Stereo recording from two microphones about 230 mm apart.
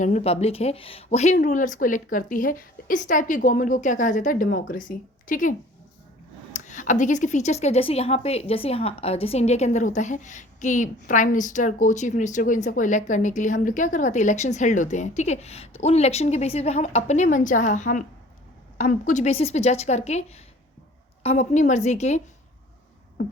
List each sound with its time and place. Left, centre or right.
0.0 s a woman's voice: left